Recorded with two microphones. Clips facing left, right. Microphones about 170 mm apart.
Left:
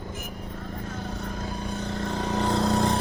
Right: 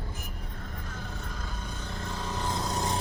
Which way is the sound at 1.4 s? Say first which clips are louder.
Left 8 dB; 80° left.